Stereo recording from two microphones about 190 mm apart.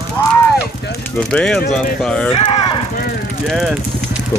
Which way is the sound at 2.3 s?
30° left (ahead or behind).